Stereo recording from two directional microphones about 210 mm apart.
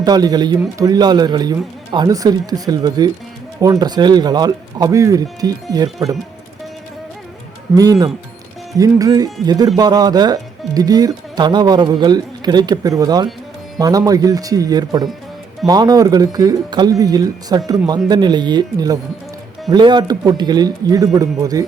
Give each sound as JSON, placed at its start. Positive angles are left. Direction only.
{"t": 0.0, "sound": "speech", "side_deg": -20}
{"t": 7.8, "sound": "speech", "side_deg": -20}